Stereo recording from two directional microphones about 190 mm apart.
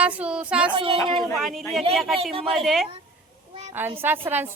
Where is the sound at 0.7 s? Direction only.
30° right (ahead or behind).